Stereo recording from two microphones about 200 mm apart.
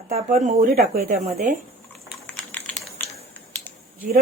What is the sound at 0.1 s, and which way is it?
A woman's voice, 40° right (ahead or behind).